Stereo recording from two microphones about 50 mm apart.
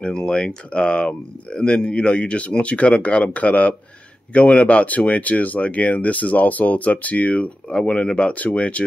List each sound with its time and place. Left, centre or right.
0.0 s speech: centre